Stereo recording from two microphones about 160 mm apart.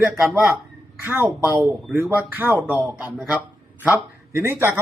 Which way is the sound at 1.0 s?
15° right (ahead or behind).